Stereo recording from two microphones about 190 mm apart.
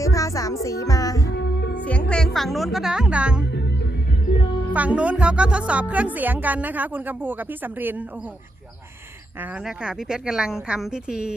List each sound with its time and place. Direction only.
0.0 s music: 15° left (ahead or behind)
1.3 s music: 60° left (ahead or behind)
1.7 s speech: 5° left (ahead or behind)
4.7 s a woman's voice: 5° right (ahead or behind)
9.4 s a woman's voice: 5° right (ahead or behind)